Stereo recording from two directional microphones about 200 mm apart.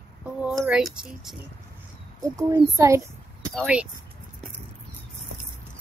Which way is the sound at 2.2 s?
15° right (ahead or behind).